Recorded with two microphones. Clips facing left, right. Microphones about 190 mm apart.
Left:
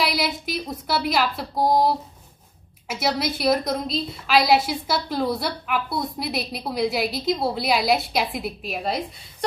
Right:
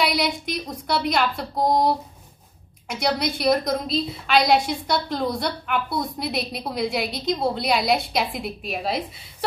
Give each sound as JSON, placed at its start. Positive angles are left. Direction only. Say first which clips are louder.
{"t": 0.0, "sound": "a woman's voice", "louder": "right 1 dB", "side_deg": 0}